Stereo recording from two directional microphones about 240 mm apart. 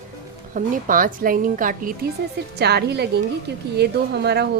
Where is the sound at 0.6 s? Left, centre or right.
Right.